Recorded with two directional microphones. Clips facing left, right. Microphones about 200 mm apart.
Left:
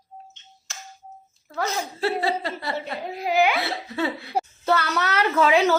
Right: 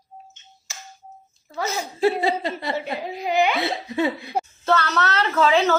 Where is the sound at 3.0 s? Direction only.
Centre (ahead or behind).